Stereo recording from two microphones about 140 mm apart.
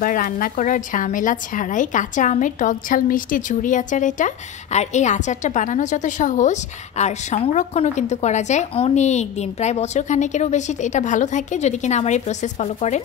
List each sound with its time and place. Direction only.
0.0 s a woman's voice: 85° left; by 13.0 s 55° left (ahead or behind)